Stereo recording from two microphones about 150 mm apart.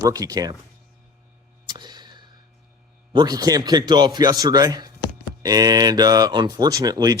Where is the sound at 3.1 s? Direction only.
30° right (ahead or behind).